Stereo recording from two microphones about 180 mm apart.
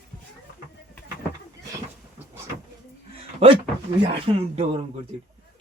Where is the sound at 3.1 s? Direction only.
30° right (ahead or behind).